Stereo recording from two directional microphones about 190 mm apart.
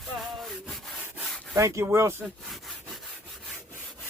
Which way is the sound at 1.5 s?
15° right (ahead or behind).